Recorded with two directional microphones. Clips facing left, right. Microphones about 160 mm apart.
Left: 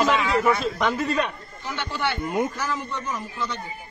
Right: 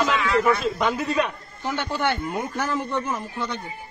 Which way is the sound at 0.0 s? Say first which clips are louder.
Even; centre (ahead or behind).